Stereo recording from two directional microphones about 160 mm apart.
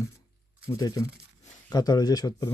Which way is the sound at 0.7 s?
20° left (ahead or behind).